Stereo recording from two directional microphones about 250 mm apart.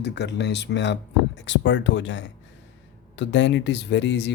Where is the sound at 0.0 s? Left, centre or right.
Left.